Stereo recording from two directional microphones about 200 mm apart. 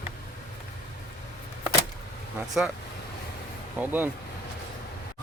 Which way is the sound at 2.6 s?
5° right (ahead or behind).